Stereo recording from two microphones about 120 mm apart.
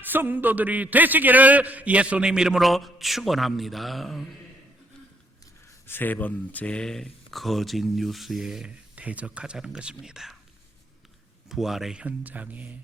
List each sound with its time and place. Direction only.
0.0 s a man's voice: 15° right (ahead or behind); by 4.3 s centre (ahead or behind)
5.8 s speech: 15° left (ahead or behind); by 10.3 s 5° right (ahead or behind)
11.4 s a man's voice: 5° right (ahead or behind)